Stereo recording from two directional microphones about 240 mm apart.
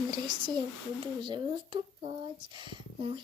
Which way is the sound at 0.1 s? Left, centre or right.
Centre.